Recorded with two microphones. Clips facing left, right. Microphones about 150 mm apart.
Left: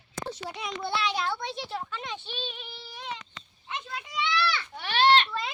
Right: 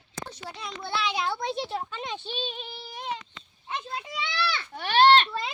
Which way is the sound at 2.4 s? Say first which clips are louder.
Right 3 dB; 30° right (ahead or behind).